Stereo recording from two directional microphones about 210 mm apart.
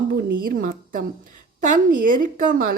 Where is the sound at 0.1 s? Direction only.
45° right (ahead or behind).